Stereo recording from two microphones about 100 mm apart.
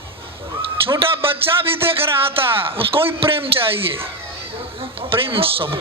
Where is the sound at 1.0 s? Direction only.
65° right (ahead or behind).